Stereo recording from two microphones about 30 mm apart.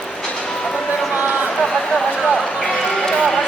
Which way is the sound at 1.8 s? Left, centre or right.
Left.